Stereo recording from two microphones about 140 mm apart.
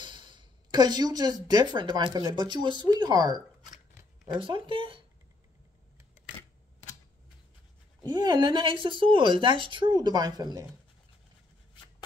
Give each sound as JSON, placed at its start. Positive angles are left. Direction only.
{"t": 0.0, "sound": "a sound", "side_deg": -35}
{"t": 1.5, "sound": "speech", "side_deg": -30}
{"t": 8.0, "sound": "speech", "side_deg": -30}